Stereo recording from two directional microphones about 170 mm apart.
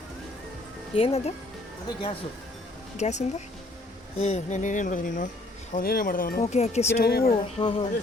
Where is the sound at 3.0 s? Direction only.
40° left (ahead or behind).